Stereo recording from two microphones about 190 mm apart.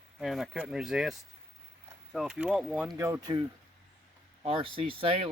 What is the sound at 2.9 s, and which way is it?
Speech, 15° right (ahead or behind).